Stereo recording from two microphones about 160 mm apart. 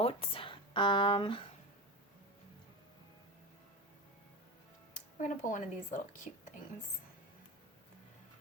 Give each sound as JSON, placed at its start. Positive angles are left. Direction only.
{"t": 0.0, "sound": "speech", "side_deg": 35}
{"t": 4.9, "sound": "speech", "side_deg": 50}